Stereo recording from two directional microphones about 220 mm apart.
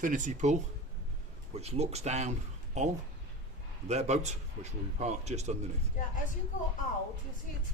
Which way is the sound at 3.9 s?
30° right (ahead or behind).